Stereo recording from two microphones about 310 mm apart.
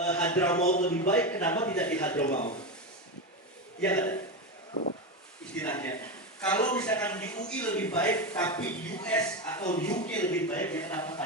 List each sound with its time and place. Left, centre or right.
0.0 s a man's voice: centre
0.6 s speech: left
1.2 s a man's voice: centre
2.3 s speech: left
3.8 s a man's voice: centre
5.5 s a man's voice: centre